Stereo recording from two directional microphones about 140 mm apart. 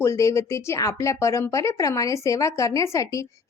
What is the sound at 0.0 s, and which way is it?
Speech, 20° left (ahead or behind).